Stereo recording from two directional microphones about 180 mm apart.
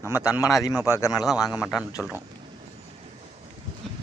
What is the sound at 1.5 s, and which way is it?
Speech, centre (ahead or behind).